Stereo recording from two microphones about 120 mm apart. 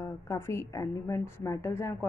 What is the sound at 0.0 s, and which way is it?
Speech, 25° left (ahead or behind).